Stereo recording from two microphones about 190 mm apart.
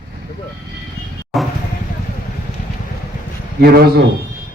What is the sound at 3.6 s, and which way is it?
Speech, 55° right (ahead or behind).